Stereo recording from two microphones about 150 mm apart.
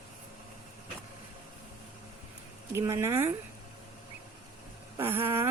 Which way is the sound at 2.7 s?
15° right (ahead or behind).